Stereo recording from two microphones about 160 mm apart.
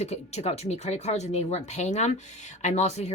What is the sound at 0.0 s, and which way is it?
Speech, 40° left (ahead or behind).